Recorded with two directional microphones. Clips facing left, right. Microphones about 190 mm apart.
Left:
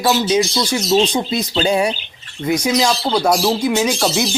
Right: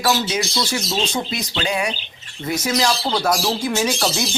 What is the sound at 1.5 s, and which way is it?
Speech, 30° left (ahead or behind).